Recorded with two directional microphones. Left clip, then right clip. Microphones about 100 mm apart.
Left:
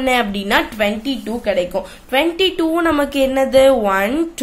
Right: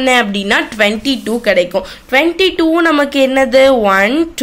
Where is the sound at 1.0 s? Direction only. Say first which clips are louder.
Right 6 dB; 80° right.